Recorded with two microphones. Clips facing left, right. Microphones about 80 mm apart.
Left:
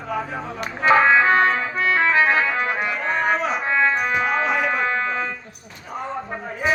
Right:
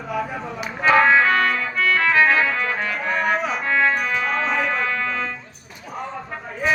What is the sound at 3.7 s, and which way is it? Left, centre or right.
Music, left.